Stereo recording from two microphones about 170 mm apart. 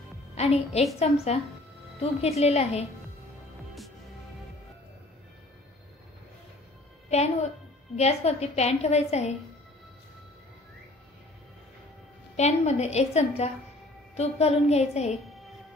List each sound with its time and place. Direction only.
0.4 s a woman's voice: 40° left (ahead or behind)
7.1 s a woman's voice: 40° left (ahead or behind)
12.4 s a woman's voice: 40° left (ahead or behind)